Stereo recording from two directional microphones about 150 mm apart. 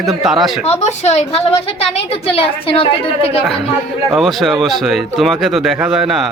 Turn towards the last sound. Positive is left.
turn(degrees=0)  # may be behind; listen again after turning